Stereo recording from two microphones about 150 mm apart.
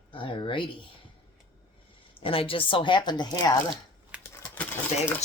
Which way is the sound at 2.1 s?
35° left (ahead or behind).